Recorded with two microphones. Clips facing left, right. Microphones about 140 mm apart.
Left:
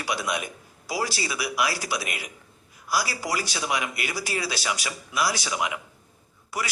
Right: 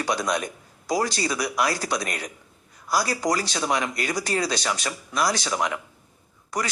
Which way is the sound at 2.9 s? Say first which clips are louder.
Right 4 dB; 45° right (ahead or behind).